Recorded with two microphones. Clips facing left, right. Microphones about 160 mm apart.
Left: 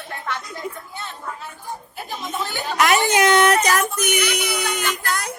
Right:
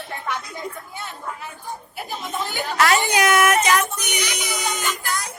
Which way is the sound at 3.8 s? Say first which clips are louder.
Left 4 dB; 50° left (ahead or behind).